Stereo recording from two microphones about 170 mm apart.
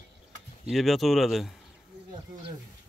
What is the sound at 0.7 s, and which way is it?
Speech, centre (ahead or behind).